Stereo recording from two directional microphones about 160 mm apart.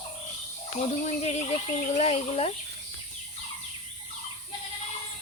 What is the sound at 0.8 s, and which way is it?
Speech, 45° left (ahead or behind).